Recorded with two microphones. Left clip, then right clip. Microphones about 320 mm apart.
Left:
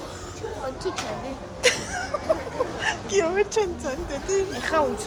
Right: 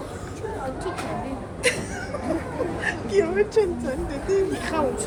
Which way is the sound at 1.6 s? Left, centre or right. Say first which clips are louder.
Left 2 dB; centre.